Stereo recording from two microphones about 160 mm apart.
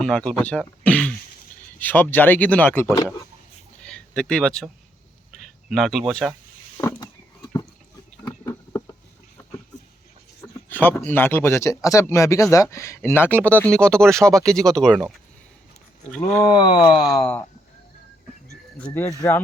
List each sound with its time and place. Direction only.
0.0 s speech: 5° left (ahead or behind)
3.8 s a sound: 5° left (ahead or behind)
5.3 s speech: centre (ahead or behind)
6.7 s a sound: 25° left (ahead or behind)
10.4 s speech: 10° left (ahead or behind)
16.1 s speech: 10° left (ahead or behind)
16.4 s speech: 25° left (ahead or behind)
17.0 s speech: 5° left (ahead or behind)
18.8 s speech: 15° left (ahead or behind)